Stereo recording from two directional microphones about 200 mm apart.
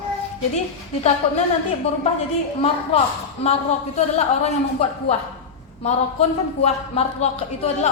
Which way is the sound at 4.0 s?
35° left (ahead or behind).